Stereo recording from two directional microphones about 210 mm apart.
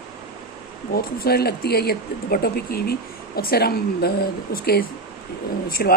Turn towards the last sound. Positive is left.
turn(degrees=45)  # may be behind; listen again after turning